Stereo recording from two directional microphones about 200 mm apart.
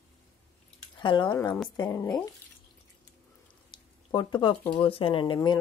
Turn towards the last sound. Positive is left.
turn(degrees=20)  # may be behind; listen again after turning